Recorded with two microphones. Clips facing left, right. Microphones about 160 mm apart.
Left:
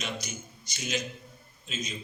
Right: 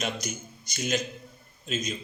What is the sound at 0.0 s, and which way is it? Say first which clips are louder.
A man's voice: right 4 dB; 50° right (ahead or behind).